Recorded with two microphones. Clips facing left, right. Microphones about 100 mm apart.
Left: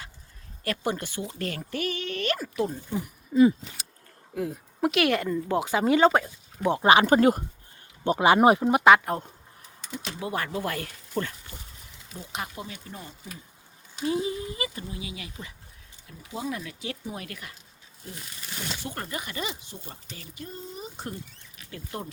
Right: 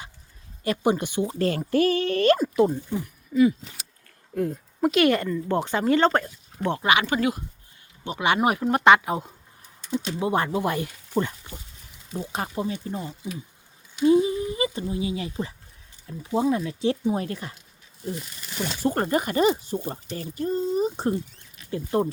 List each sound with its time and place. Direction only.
0.6 s speech: 20° right (ahead or behind)
1.3 s speech: 30° right (ahead or behind)
2.4 s speech: 25° right (ahead or behind)
4.4 s speech: 5° left (ahead or behind)
6.8 s speech: 35° left (ahead or behind)
8.7 s speech: centre (ahead or behind)
10.2 s speech: 25° right (ahead or behind)
12.1 s speech: 35° right (ahead or behind)
18.8 s speech: 40° right (ahead or behind)